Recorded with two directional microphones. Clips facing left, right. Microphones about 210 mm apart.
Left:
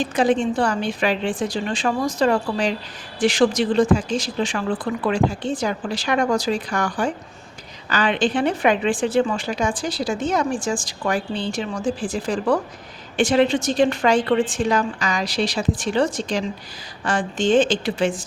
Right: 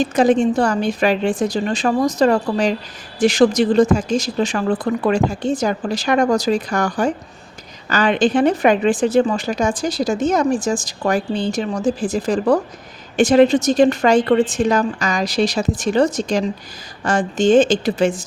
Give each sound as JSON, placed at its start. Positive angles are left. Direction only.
{"t": 0.0, "sound": "a woman's voice", "side_deg": -40}